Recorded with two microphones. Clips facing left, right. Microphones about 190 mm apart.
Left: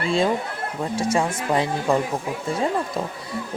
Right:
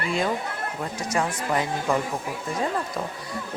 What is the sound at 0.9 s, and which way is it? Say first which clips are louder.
Speech: left 6 dB; 25° left (ahead or behind).